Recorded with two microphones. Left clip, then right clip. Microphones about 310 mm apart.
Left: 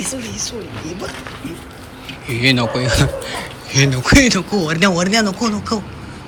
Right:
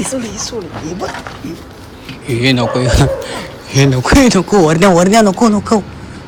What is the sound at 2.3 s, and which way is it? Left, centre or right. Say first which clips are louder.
Speech: right 3 dB; centre.